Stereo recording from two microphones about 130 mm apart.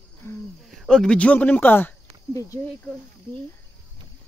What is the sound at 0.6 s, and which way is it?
Speech, centre (ahead or behind).